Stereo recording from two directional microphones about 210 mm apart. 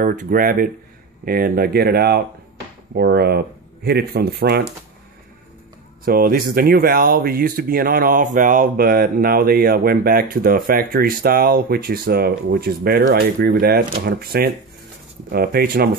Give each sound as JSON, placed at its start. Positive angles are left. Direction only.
{"t": 0.0, "sound": "speech", "side_deg": -40}
{"t": 6.0, "sound": "speech", "side_deg": -45}